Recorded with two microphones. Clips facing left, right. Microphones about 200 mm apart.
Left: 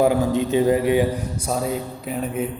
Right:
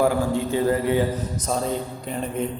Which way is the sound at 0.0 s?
20° left (ahead or behind).